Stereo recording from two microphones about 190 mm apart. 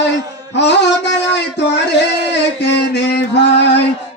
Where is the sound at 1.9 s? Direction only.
65° left (ahead or behind).